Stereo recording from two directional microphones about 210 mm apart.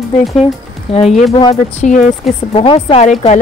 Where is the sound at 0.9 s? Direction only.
Centre (ahead or behind).